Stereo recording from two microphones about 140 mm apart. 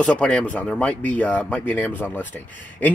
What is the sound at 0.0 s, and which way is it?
Speech, 5° left (ahead or behind).